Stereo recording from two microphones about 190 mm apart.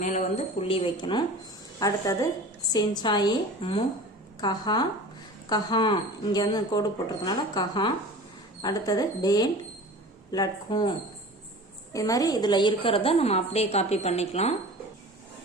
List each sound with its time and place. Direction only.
0.0 s a woman's voice: 40° left (ahead or behind); by 10.9 s 20° left (ahead or behind)
11.9 s a woman's voice: 20° left (ahead or behind); by 14.5 s 35° left (ahead or behind)